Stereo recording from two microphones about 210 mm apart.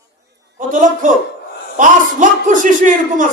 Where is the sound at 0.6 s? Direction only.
40° right (ahead or behind).